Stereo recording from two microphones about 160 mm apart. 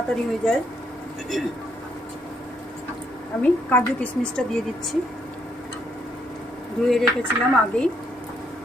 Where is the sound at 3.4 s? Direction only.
10° left (ahead or behind).